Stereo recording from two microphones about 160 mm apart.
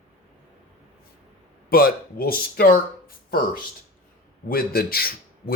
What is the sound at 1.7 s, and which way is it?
Speech, 65° left (ahead or behind).